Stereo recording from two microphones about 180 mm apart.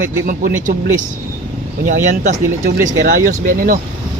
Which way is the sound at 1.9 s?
45° right (ahead or behind).